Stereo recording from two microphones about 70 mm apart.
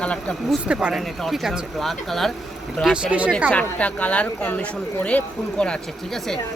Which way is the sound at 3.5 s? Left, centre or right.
Centre.